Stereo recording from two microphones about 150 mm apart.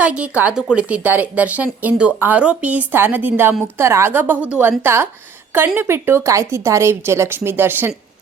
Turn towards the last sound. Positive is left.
turn(degrees=-15)  # may be behind; listen again after turning